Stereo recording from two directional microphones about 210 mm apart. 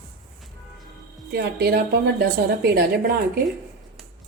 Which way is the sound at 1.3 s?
50° right (ahead or behind).